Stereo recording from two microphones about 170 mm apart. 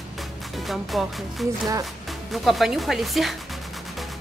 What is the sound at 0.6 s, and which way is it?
A woman's voice, centre (ahead or behind).